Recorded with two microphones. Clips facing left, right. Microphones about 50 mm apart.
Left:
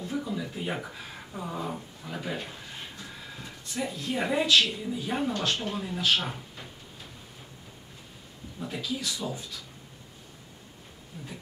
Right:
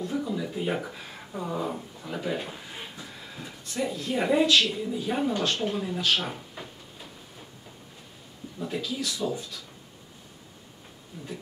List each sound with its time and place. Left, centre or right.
0.0 s a sound: centre
2.3 s speech: centre
8.5 s speech: centre
11.1 s speech: centre